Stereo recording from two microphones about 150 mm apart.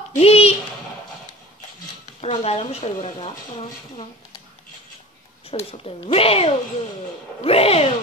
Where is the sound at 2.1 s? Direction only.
40° left (ahead or behind).